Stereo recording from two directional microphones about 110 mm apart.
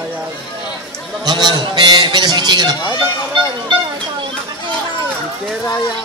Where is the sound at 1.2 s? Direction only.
45° right (ahead or behind).